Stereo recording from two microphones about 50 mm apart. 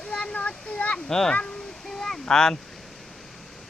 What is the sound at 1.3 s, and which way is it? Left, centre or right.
Speech, left.